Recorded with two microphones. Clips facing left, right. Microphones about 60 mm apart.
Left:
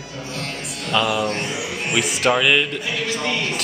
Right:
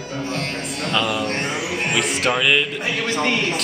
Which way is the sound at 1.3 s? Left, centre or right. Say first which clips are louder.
Right 2 dB; right.